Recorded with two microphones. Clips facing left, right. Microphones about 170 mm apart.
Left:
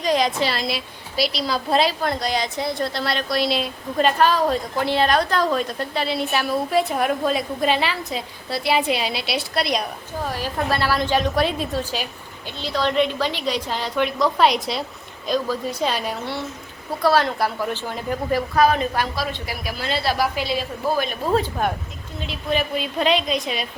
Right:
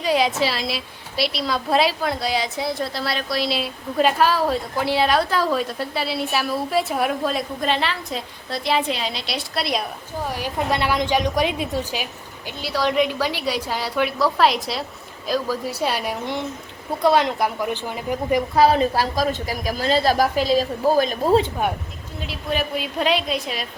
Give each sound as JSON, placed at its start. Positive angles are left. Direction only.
{"t": 0.0, "sound": "a woman's voice", "side_deg": -5}
{"t": 10.2, "sound": "a woman's voice", "side_deg": -15}
{"t": 18.5, "sound": "a woman's voice", "side_deg": -30}
{"t": 22.3, "sound": "a woman's voice", "side_deg": -10}